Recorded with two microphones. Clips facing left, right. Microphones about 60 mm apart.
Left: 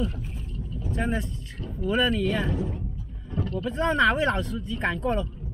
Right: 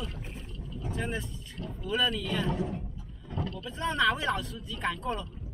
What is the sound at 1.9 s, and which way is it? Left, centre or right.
Speech, left.